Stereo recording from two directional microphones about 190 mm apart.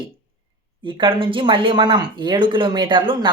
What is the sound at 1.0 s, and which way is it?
Speech, 25° right (ahead or behind).